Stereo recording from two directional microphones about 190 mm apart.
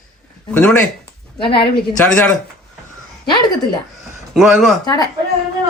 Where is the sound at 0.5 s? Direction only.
5° left (ahead or behind).